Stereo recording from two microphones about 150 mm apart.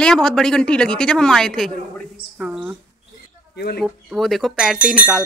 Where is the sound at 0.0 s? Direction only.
5° left (ahead or behind).